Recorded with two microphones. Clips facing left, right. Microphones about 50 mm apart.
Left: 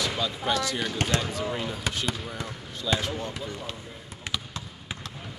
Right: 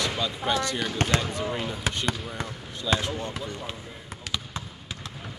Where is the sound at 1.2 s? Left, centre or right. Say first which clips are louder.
Right 1 dB; centre.